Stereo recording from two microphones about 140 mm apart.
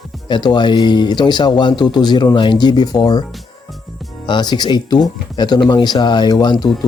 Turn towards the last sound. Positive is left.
turn(degrees=30)  # may be behind; listen again after turning